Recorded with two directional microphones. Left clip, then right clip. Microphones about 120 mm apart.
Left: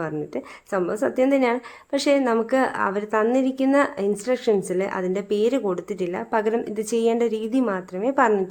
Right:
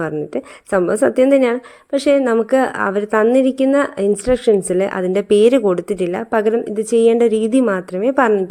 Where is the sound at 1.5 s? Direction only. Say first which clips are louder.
Right 5 dB; 30° right (ahead or behind).